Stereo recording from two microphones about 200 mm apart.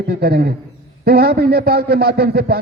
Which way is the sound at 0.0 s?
50° right (ahead or behind).